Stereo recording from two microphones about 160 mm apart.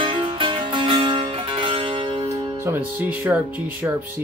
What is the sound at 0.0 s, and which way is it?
Music, 35° right (ahead or behind).